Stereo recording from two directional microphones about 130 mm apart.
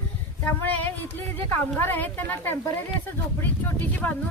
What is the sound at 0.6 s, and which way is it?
Speech, 15° left (ahead or behind).